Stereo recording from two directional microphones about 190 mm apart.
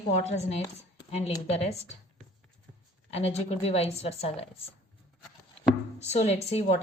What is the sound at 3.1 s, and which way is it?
A woman's voice, 35° left (ahead or behind).